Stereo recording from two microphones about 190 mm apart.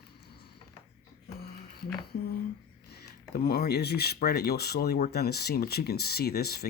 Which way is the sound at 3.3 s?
55° left (ahead or behind).